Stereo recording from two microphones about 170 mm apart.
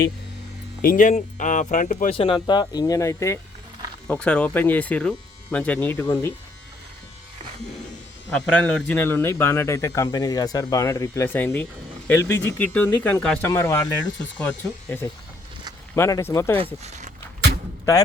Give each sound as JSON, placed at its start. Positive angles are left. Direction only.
{"t": 0.8, "sound": "speech", "side_deg": 55}
{"t": 2.1, "sound": "speech", "side_deg": 30}
{"t": 4.0, "sound": "a man's voice", "side_deg": 5}
{"t": 8.4, "sound": "a man's voice", "side_deg": 10}
{"t": 13.5, "sound": "a man's voice", "side_deg": 20}
{"t": 16.8, "sound": "a sound", "side_deg": -40}